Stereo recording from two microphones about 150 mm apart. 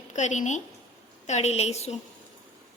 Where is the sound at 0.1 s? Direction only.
55° left (ahead or behind).